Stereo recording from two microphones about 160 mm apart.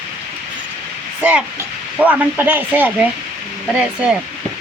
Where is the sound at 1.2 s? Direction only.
10° right (ahead or behind).